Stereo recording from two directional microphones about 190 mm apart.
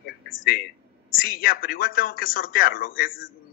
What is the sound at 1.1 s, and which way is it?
A woman's voice, 50° left (ahead or behind).